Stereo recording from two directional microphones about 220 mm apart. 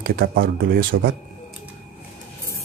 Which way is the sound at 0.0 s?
45° right (ahead or behind).